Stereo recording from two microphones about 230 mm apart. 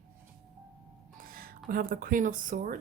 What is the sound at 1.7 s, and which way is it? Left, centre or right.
Speech, right.